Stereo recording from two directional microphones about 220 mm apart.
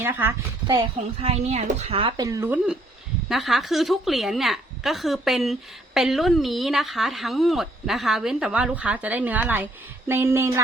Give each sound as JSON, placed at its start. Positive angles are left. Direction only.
{"t": 0.0, "sound": "a woman's voice", "side_deg": -10}
{"t": 0.8, "sound": "a woman's voice", "side_deg": -25}